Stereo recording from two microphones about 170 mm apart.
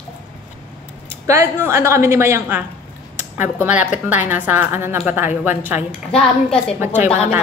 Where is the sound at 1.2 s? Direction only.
15° right (ahead or behind).